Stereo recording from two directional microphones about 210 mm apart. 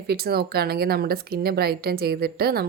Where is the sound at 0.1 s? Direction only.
50° right (ahead or behind).